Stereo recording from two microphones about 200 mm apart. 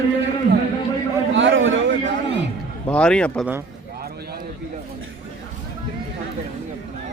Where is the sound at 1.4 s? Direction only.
70° right (ahead or behind).